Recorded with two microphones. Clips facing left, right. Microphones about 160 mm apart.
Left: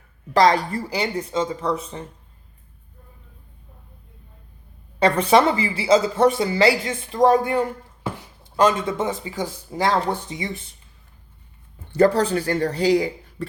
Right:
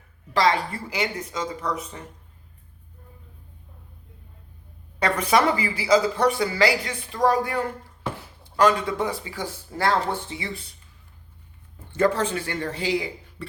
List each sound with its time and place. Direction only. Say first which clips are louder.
0.3 s speech: left 5 dB; 40° left (ahead or behind)
4.9 s speech: left 5 dB; 30° left (ahead or behind)
11.9 s speech: left 5 dB; 35° left (ahead or behind)